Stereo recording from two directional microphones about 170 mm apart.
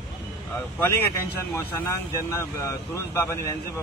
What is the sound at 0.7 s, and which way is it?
Speech, 10° left (ahead or behind).